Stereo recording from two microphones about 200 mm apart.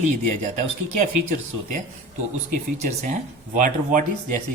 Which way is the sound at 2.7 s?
40° right (ahead or behind).